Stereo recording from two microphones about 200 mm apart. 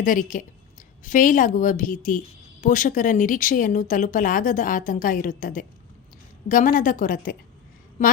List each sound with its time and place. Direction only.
0.0 s a woman's voice: 40° left (ahead or behind)